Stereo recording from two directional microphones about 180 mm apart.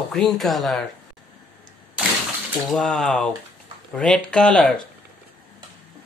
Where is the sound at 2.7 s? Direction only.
Centre (ahead or behind).